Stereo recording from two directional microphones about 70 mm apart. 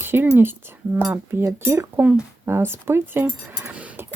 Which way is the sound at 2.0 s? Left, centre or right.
Centre.